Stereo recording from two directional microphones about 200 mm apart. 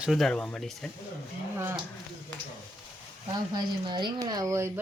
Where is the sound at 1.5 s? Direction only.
10° right (ahead or behind).